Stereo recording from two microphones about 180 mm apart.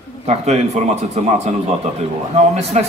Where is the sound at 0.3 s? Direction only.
35° right (ahead or behind).